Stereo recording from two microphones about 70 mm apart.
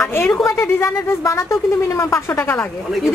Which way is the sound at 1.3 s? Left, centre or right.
Left.